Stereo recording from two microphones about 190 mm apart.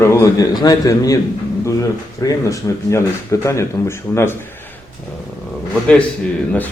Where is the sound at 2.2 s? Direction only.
15° left (ahead or behind).